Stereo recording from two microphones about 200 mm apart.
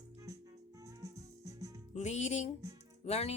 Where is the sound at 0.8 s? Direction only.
15° right (ahead or behind).